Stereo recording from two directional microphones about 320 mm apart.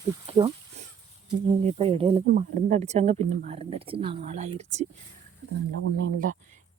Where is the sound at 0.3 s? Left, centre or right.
Centre.